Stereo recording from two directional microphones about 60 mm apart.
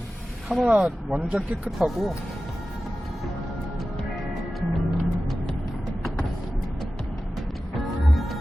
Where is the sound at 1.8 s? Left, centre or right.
Centre.